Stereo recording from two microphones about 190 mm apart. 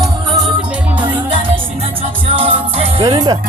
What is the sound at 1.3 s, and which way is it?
Music, 30° right (ahead or behind).